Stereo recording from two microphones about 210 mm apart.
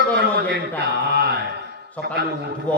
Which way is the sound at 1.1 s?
50° right (ahead or behind).